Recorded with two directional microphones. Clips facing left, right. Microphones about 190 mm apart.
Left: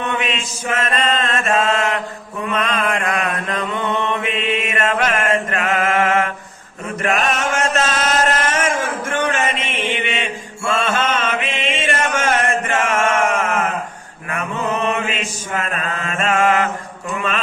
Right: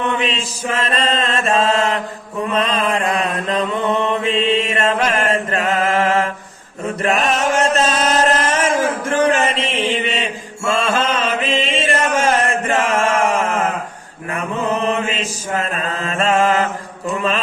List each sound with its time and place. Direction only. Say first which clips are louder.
0.2 s mantra: right 2 dB; 30° right (ahead or behind)
7.0 s chant: right 2 dB; 35° right (ahead or behind)
15.6 s mantra: right 2 dB; 35° right (ahead or behind)